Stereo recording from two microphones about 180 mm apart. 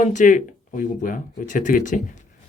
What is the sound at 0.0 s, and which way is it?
Speech, 45° left (ahead or behind).